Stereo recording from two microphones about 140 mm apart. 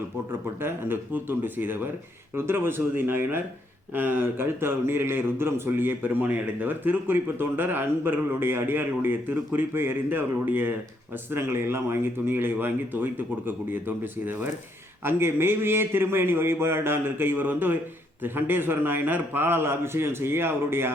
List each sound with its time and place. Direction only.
0.6 s a man's voice: 15° right (ahead or behind)